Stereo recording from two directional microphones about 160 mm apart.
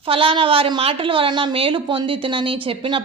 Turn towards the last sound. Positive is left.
turn(degrees=-35)  # may be behind; listen again after turning